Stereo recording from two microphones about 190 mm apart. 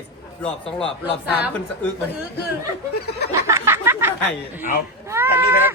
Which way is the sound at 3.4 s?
15° right (ahead or behind).